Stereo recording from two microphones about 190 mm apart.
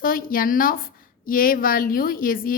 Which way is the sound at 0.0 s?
50° left (ahead or behind).